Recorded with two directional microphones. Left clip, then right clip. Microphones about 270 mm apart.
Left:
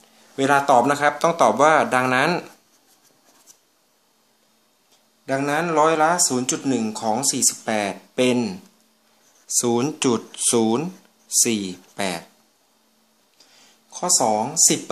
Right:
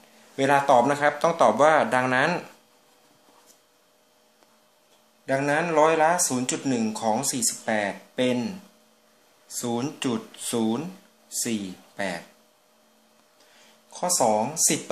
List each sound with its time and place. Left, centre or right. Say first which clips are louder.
0.4 s speech: left 3 dB; centre
5.2 s speech: left 2 dB; centre
9.6 s speech: left 8 dB; left
13.8 s speech: left 2 dB; centre